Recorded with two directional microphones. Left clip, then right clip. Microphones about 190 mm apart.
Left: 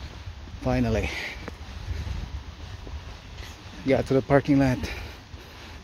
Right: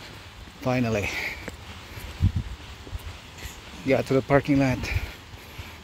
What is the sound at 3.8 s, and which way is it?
Speech, 15° left (ahead or behind).